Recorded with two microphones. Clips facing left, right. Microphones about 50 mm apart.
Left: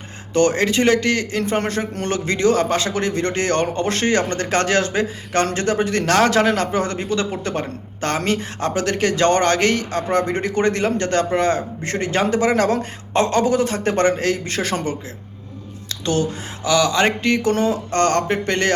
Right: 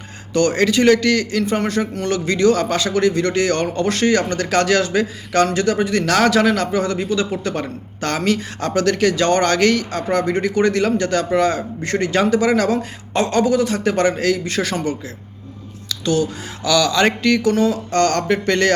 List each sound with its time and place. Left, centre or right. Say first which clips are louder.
0.3 s a man's voice: right 1 dB; left